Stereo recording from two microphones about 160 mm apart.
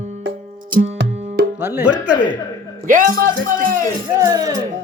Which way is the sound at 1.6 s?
10° right (ahead or behind).